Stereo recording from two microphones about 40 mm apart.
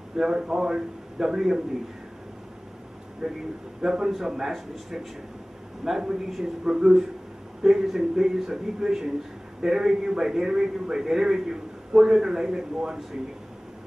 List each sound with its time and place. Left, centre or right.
0.1 s a man's voice: centre
3.2 s a man's voice: centre